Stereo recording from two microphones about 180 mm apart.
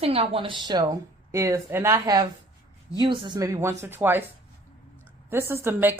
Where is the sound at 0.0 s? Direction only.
35° right (ahead or behind); by 4.2 s 10° right (ahead or behind).